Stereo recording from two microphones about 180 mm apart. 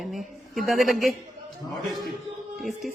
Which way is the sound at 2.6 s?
Centre (ahead or behind).